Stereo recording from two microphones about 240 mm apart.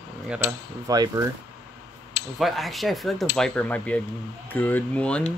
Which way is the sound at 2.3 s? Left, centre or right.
Centre.